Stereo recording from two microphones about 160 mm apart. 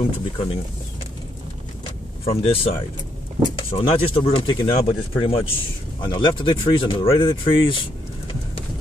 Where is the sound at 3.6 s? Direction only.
35° left (ahead or behind).